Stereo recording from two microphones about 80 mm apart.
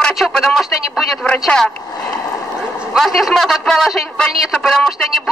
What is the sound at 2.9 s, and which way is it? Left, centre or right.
A man's voice, centre.